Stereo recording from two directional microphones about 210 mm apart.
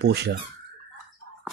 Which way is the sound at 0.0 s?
50° right (ahead or behind).